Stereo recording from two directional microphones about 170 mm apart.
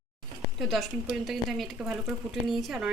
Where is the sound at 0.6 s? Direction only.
Centre (ahead or behind).